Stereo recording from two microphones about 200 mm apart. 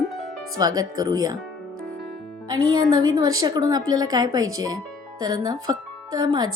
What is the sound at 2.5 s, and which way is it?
A woman's voice, 20° right (ahead or behind).